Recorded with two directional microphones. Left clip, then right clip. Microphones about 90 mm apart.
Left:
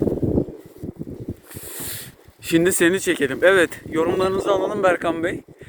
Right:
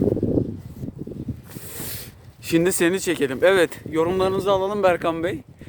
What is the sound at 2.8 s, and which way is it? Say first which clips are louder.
Speech: left 3 dB; 10° right (ahead or behind).